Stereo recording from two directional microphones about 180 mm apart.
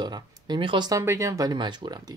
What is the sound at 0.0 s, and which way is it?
Speech, 25° right (ahead or behind).